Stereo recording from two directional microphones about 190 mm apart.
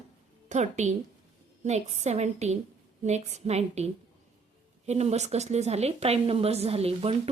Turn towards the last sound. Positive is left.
turn(degrees=-30)  # may be behind; listen again after turning